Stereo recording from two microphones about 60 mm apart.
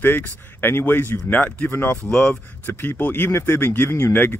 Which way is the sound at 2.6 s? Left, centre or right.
Left.